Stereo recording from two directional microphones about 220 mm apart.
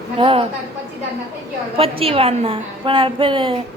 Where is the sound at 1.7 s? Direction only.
25° right (ahead or behind).